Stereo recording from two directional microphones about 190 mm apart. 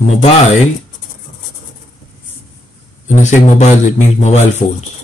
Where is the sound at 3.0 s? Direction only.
35° left (ahead or behind).